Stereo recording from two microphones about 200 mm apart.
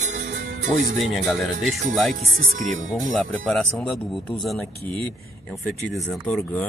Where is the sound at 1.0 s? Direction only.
Centre (ahead or behind).